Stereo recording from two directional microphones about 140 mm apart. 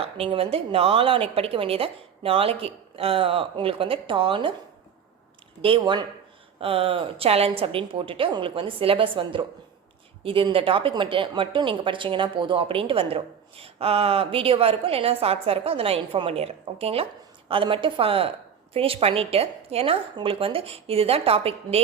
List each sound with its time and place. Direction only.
0.0 s speech: 45° right (ahead or behind)
5.6 s a woman's voice: 35° right (ahead or behind)